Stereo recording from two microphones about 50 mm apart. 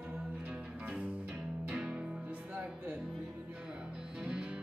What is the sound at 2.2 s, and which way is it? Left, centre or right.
Music, right.